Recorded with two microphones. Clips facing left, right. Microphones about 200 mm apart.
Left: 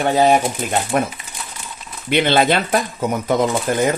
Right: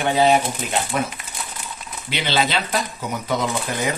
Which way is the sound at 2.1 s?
55° left (ahead or behind).